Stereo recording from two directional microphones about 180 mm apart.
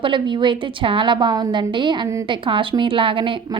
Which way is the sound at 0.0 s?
25° right (ahead or behind).